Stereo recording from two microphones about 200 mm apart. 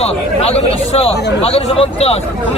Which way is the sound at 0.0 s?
30° left (ahead or behind).